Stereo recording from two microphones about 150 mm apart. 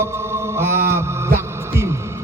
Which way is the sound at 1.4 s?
15° right (ahead or behind).